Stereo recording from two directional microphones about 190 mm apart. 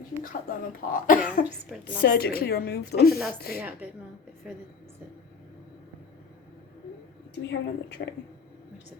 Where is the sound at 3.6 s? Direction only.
10° right (ahead or behind).